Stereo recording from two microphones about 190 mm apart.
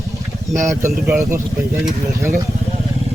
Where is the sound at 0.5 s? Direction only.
15° right (ahead or behind).